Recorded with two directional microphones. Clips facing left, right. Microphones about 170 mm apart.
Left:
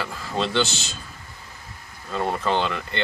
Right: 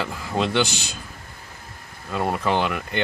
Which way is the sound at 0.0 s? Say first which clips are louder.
Right 2 dB; 15° right (ahead or behind).